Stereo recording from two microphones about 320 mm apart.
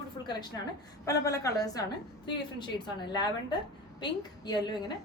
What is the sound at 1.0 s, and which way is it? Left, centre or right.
A woman's voice, centre.